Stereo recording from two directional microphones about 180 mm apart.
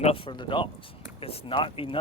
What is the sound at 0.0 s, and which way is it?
Speech, 30° left (ahead or behind).